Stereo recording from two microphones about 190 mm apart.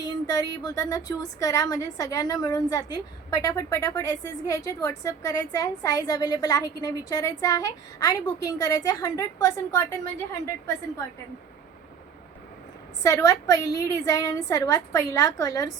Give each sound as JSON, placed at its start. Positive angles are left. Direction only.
{"t": 0.0, "sound": "a woman's voice", "side_deg": 20}
{"t": 13.0, "sound": "a woman's voice", "side_deg": 15}